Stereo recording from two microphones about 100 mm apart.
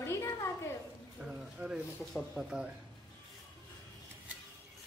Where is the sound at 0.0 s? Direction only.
30° left (ahead or behind).